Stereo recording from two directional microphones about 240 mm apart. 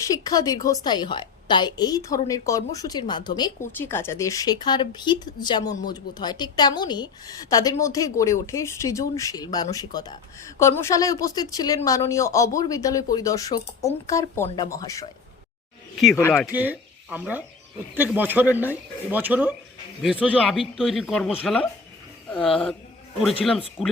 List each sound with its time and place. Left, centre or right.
0.0 s a woman's voice: centre
16.0 s a man's voice: centre
23.8 s a man's voice: centre